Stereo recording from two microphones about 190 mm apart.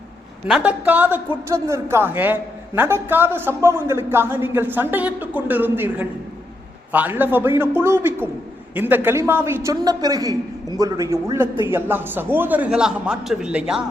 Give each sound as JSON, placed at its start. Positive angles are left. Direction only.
{"t": 0.4, "sound": "a woman's voice", "side_deg": -5}